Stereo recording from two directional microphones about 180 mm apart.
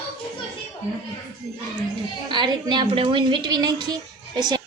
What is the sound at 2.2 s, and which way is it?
A woman's voice, 25° right (ahead or behind).